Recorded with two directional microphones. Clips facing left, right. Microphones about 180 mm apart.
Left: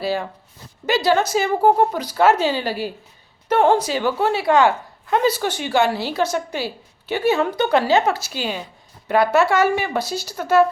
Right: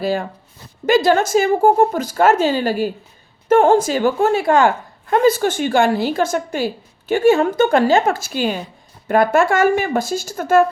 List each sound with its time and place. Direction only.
0.0 s a woman's voice: 45° right (ahead or behind)